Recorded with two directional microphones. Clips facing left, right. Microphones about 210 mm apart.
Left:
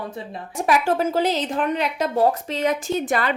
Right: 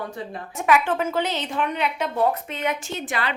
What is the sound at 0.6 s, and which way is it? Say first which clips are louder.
A woman's voice: left 1 dB; 40° left (ahead or behind).